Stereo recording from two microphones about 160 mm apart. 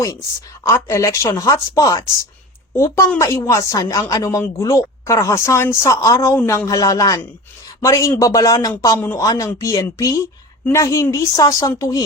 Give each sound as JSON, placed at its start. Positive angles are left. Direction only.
{"t": 0.0, "sound": "a woman's voice", "side_deg": 20}